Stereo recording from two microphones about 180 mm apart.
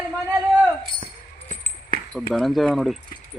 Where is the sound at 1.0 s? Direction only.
50° left (ahead or behind).